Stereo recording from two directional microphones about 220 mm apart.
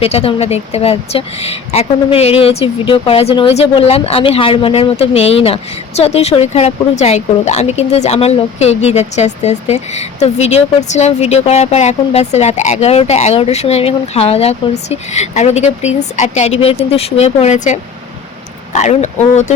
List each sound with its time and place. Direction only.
0.0 s speech: 25° left (ahead or behind)